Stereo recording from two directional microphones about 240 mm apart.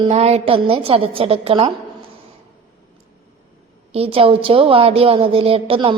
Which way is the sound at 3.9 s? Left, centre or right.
Right.